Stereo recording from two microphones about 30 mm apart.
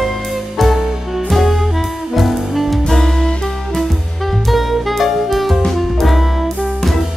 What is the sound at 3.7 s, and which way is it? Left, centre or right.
Music, centre.